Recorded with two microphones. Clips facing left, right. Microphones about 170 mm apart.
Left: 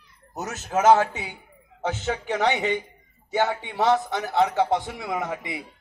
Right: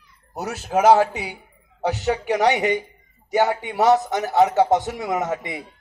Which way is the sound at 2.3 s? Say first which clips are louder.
Right 4 dB; 15° right (ahead or behind).